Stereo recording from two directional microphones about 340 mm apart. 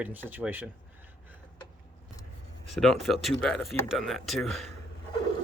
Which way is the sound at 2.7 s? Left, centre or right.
Centre.